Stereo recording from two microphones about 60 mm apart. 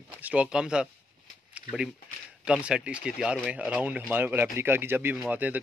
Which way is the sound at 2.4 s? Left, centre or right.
Centre.